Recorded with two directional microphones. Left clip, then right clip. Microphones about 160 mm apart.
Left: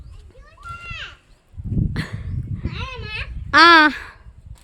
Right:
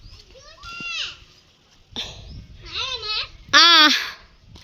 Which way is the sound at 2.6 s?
10° left (ahead or behind).